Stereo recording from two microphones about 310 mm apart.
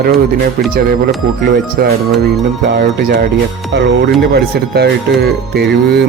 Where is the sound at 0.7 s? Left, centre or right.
Right.